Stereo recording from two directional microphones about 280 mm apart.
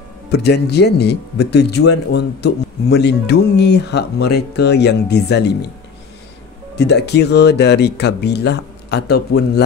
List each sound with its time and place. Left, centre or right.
0.3 s speech: left
6.8 s speech: left